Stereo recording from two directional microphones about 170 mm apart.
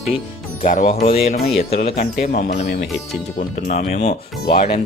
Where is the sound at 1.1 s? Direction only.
35° left (ahead or behind).